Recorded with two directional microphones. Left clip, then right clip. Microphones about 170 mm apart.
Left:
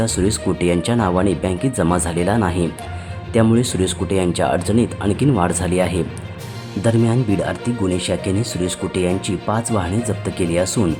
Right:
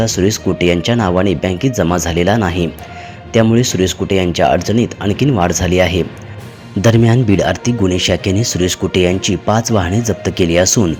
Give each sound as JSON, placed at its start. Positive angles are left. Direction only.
{"t": 0.0, "sound": "speech", "side_deg": -10}
{"t": 6.8, "sound": "speech", "side_deg": -20}